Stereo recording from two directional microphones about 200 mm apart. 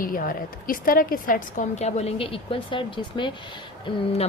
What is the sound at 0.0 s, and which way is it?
A woman's voice, 45° left (ahead or behind).